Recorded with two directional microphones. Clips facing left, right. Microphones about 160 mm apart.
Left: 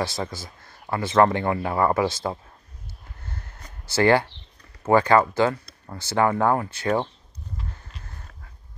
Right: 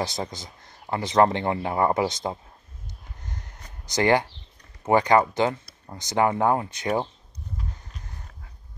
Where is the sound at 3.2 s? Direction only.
15° right (ahead or behind).